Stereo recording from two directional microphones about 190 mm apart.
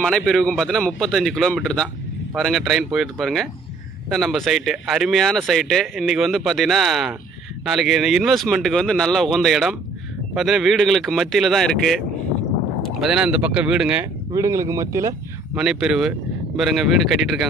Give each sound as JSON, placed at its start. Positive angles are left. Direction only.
{"t": 0.0, "sound": "speech", "side_deg": 5}
{"t": 14.3, "sound": "speech", "side_deg": -15}
{"t": 15.5, "sound": "speech", "side_deg": -5}